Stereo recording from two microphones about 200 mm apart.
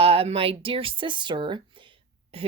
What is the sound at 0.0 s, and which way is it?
Speech, 30° right (ahead or behind).